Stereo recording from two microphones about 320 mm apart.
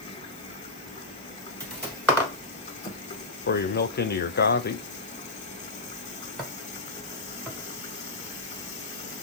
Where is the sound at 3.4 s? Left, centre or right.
Left.